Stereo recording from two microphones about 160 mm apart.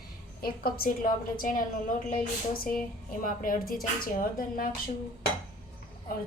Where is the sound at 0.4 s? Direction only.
65° left (ahead or behind).